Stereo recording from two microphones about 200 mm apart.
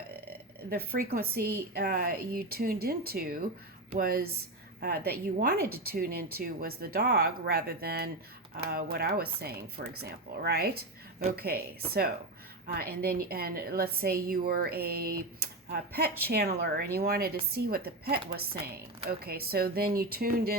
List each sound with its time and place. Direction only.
0.7 s a woman's voice: 50° right (ahead or behind)